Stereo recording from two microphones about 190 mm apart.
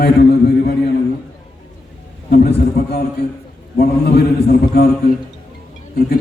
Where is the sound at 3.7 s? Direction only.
55° left (ahead or behind).